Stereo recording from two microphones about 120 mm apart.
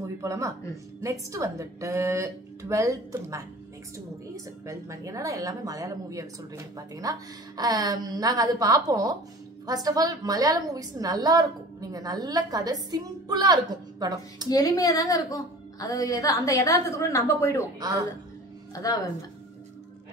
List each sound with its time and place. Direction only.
0.0 s a woman's voice: 25° right (ahead or behind)
4.6 s a woman's voice: 25° right (ahead or behind)
14.5 s a woman's voice: 30° left (ahead or behind)